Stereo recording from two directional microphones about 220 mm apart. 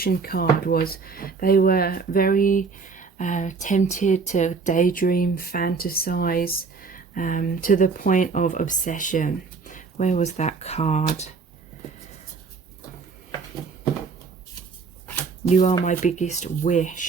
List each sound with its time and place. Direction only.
0.0 s speech: 45° left (ahead or behind)
15.4 s speech: 30° left (ahead or behind)